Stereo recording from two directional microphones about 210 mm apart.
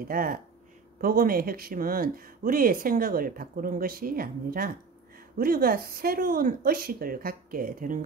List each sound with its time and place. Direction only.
0.1 s speech: 40° right (ahead or behind)